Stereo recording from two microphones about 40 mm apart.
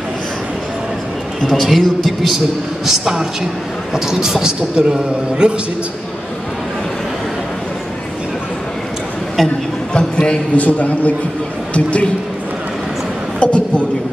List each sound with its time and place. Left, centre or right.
1.4 s a man's voice: centre; by 5.5 s right
9.4 s a man's voice: centre
9.9 s a man's voice: left
10.5 s a man's voice: left
13.4 s a man's voice: left